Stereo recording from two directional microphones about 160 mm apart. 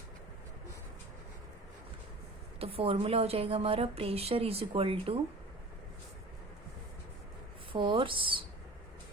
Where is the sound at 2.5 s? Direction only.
35° right (ahead or behind).